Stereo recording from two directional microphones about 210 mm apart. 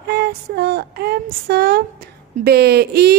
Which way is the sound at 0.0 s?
50° right (ahead or behind).